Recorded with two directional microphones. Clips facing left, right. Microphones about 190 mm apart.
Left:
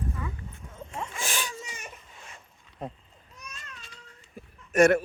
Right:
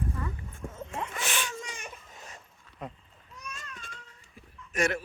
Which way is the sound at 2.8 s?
30° left (ahead or behind).